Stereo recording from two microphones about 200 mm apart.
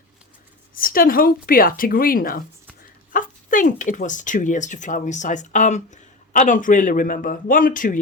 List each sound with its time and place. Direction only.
0.8 s a woman's voice: 45° left (ahead or behind)